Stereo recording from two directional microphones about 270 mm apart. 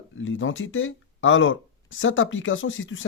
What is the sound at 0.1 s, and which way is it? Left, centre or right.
Speech, left.